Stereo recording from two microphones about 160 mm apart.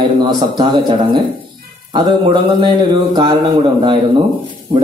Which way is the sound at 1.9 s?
30° right (ahead or behind).